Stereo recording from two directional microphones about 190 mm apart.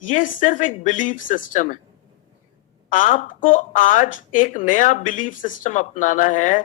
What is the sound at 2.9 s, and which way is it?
Speech, 45° left (ahead or behind).